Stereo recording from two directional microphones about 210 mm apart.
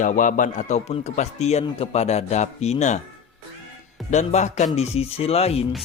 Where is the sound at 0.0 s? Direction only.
40° left (ahead or behind).